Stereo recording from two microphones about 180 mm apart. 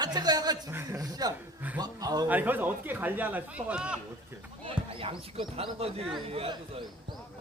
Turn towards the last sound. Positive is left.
turn(degrees=-30)  # may be behind; listen again after turning